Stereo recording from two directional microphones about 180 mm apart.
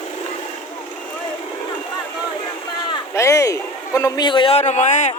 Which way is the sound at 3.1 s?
15° left (ahead or behind).